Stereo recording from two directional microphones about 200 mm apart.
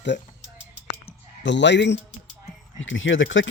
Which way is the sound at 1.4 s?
60° left (ahead or behind).